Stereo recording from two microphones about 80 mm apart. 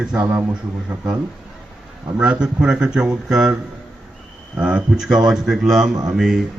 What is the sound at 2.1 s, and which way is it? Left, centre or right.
A man's voice, centre.